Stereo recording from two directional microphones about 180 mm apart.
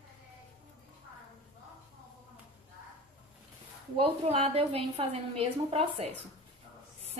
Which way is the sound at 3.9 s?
35° right (ahead or behind).